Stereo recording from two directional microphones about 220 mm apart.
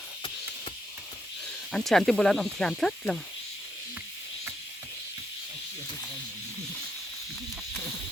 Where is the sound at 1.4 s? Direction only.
Centre (ahead or behind).